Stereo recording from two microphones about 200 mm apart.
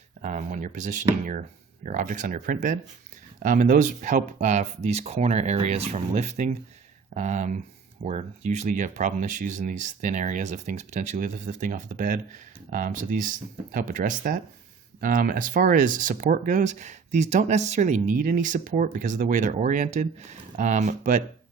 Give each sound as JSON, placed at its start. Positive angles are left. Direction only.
{"t": 0.2, "sound": "speech", "side_deg": -35}